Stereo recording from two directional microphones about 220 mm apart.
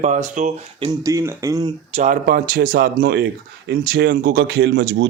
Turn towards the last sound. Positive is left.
turn(degrees=-55)  # may be behind; listen again after turning